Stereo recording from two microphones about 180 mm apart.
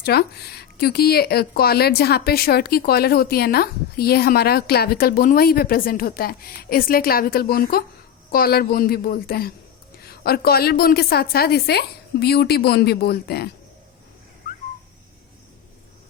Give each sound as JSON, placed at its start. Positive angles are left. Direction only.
{"t": 0.0, "sound": "speech", "side_deg": 60}